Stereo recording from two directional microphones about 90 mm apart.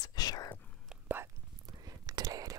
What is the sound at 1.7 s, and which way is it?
Whispering, 45° right (ahead or behind).